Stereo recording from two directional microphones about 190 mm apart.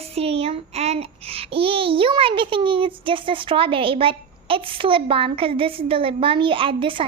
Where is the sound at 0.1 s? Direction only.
30° right (ahead or behind).